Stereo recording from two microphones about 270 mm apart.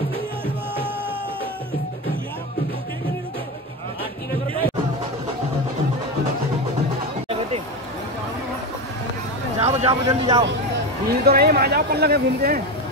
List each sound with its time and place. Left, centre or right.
9.6 s speech: right
11.1 s speech: right